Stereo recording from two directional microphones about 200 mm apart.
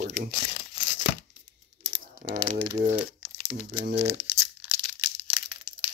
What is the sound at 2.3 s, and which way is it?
Speech, 35° right (ahead or behind).